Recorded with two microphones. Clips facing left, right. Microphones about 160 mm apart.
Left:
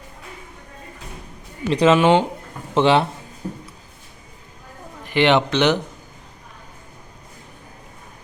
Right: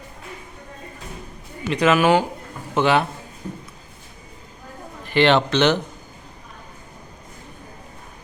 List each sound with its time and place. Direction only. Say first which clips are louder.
1.7 s speech: left 2 dB; 30° left (ahead or behind)
5.0 s speech: even; 15° left (ahead or behind)